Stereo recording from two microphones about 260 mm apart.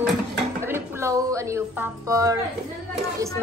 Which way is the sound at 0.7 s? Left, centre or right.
Centre.